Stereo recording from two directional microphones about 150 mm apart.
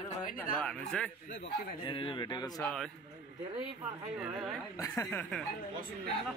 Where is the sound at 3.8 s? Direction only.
15° right (ahead or behind).